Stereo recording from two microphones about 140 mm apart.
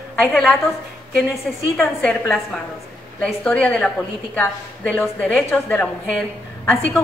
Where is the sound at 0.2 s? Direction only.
Centre (ahead or behind).